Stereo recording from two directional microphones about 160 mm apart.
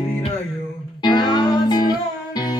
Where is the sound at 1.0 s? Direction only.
25° left (ahead or behind).